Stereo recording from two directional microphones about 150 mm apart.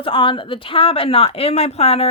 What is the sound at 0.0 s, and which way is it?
Speech, 35° left (ahead or behind).